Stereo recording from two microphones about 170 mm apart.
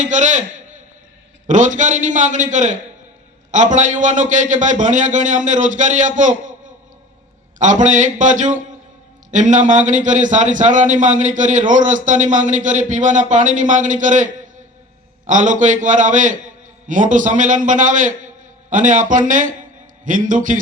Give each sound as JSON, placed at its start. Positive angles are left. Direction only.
{"t": 0.0, "sound": "a man's voice", "side_deg": -45}
{"t": 1.5, "sound": "a man's voice", "side_deg": -45}
{"t": 7.6, "sound": "a man's voice", "side_deg": -45}